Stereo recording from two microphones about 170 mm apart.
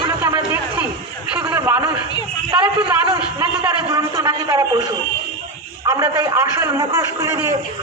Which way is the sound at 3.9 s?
20° right (ahead or behind).